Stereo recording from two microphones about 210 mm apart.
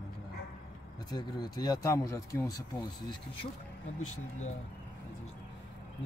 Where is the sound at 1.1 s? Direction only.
20° left (ahead or behind).